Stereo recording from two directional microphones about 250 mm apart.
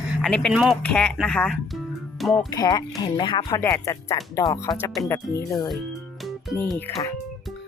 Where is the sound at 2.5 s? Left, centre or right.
Centre.